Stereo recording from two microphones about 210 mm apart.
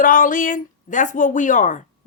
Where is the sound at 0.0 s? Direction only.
40° left (ahead or behind).